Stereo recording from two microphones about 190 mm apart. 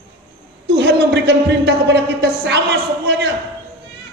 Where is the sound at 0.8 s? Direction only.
65° right (ahead or behind).